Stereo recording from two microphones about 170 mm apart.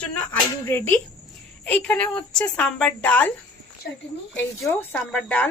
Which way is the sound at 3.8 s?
70° left (ahead or behind).